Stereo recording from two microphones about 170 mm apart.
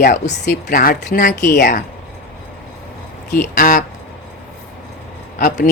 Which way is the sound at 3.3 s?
60° left (ahead or behind).